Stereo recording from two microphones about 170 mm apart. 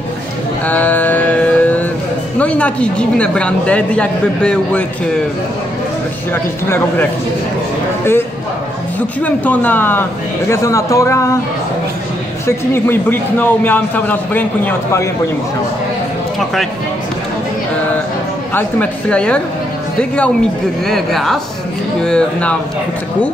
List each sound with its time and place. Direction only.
0.7 s music: 10° left (ahead or behind)
2.3 s speech: 10° left (ahead or behind)
8.0 s speech: 15° left (ahead or behind)
12.4 s speech: 15° left (ahead or behind)
18.5 s speech: 10° left (ahead or behind)
20.8 s speech: centre (ahead or behind)